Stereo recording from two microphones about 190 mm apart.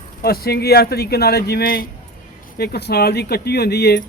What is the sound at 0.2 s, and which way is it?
Speech, 55° left (ahead or behind).